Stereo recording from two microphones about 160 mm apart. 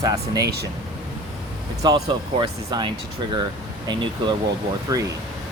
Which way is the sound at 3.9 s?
30° right (ahead or behind).